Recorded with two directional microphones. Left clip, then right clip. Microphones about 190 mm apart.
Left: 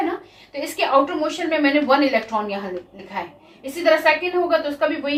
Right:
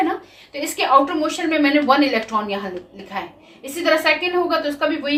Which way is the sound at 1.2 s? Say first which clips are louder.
Right 1 dB; 25° right (ahead or behind).